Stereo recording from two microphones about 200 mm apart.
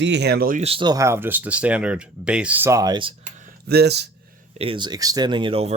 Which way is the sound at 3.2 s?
40° right (ahead or behind).